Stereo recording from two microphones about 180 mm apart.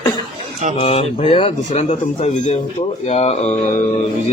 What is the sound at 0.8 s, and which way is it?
Speech, 35° left (ahead or behind).